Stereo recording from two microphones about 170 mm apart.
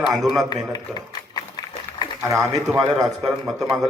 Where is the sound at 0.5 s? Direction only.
25° left (ahead or behind).